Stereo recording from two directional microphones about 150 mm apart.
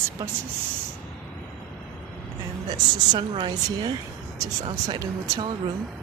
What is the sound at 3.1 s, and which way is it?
Speech, 30° right (ahead or behind).